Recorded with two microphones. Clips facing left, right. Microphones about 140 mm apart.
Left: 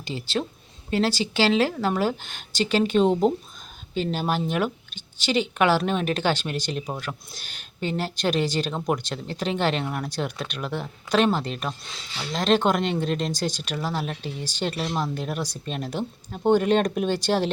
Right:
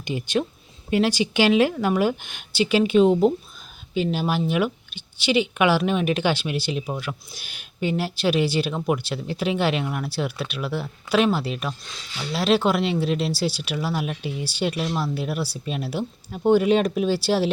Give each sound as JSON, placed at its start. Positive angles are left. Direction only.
{"t": 0.0, "sound": "speech", "side_deg": -15}